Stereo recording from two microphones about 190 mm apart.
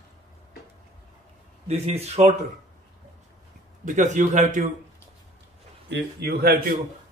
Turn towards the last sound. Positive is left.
turn(degrees=-50)  # may be behind; listen again after turning